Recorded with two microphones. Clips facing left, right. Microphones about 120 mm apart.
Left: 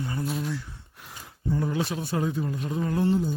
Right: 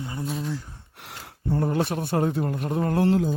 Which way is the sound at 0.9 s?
80° right.